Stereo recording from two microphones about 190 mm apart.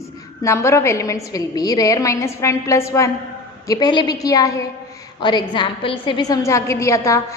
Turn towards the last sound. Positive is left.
turn(degrees=15)  # may be behind; listen again after turning